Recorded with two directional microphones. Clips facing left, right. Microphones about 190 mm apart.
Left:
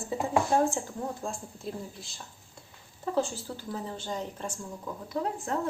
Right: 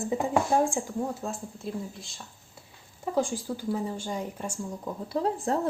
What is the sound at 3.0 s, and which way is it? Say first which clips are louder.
A woman's voice: right 2 dB; 10° right (ahead or behind).